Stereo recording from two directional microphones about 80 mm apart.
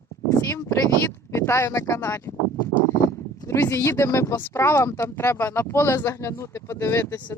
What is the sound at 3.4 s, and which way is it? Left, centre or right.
Speech, left.